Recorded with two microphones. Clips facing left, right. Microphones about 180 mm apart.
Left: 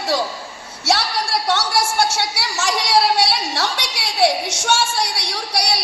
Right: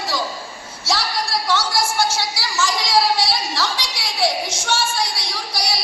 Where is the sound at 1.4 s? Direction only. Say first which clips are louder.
Left 1 dB; 70° left (ahead or behind).